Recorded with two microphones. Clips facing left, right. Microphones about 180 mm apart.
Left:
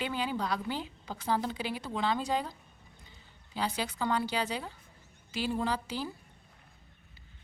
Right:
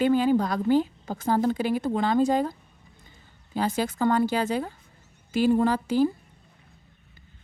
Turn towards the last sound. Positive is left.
turn(degrees=-50)  # may be behind; listen again after turning